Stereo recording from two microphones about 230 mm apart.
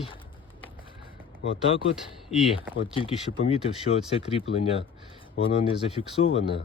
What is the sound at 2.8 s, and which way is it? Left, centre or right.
Speech, left.